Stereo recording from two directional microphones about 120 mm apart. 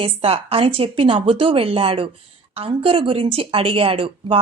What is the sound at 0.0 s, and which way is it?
A woman's voice, 50° right (ahead or behind).